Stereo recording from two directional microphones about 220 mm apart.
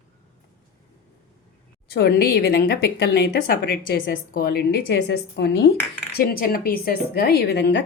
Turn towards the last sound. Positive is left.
turn(degrees=50)  # may be behind; listen again after turning